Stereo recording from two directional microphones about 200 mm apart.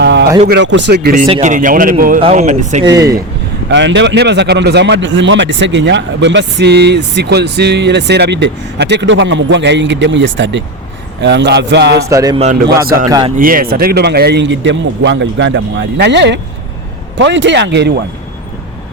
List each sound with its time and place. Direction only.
0.0 s a sound: 60° right (ahead or behind)
0.4 s speech: 60° right (ahead or behind)
1.1 s a man's voice: 40° right (ahead or behind)
2.8 s speech: 20° right (ahead or behind)
3.7 s speech: 60° right (ahead or behind)
12.0 s speech: 15° right (ahead or behind)
13.3 s speech: 45° right (ahead or behind)